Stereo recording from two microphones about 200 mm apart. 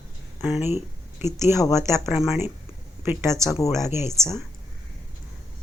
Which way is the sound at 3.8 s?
15° right (ahead or behind).